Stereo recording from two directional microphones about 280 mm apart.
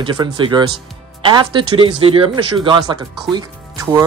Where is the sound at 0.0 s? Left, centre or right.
Centre.